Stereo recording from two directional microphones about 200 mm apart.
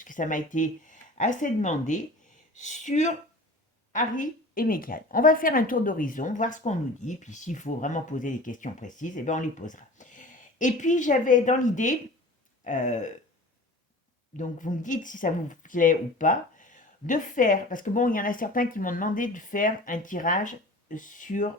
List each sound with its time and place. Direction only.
0.0 s a woman's voice: 40° left (ahead or behind)
14.3 s a woman's voice: 40° left (ahead or behind)